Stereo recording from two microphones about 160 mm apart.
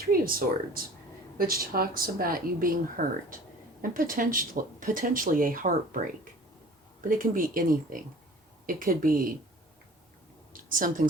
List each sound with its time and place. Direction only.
0.0 s speech: 65° right (ahead or behind)
7.1 s speech: 60° right (ahead or behind)
10.5 s a sound: 60° right (ahead or behind)